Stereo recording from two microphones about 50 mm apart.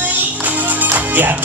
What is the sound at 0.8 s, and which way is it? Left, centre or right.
Music, right.